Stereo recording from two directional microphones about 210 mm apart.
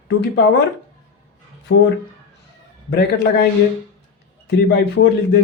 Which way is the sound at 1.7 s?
90° left.